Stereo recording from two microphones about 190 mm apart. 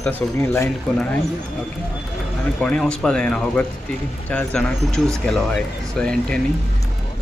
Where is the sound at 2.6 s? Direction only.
5° left (ahead or behind).